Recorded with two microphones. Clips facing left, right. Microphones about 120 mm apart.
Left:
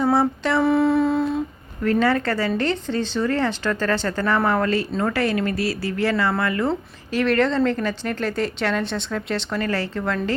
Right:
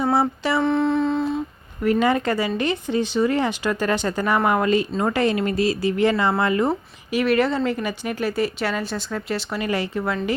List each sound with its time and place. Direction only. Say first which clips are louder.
0.0 s a sound: left 1 dB; 10° right (ahead or behind)
0.6 s humming: left 3 dB; 5° left (ahead or behind)
1.8 s speech: even; 15° right (ahead or behind)